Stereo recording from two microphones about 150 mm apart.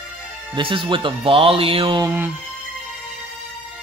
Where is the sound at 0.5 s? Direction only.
35° right (ahead or behind).